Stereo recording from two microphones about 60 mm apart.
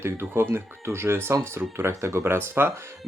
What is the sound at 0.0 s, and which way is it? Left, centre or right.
Speech, right.